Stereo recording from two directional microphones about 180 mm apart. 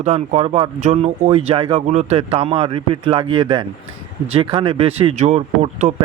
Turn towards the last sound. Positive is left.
turn(degrees=-40)  # may be behind; listen again after turning